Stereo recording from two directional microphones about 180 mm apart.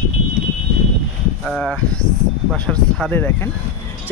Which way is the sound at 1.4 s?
Centre (ahead or behind).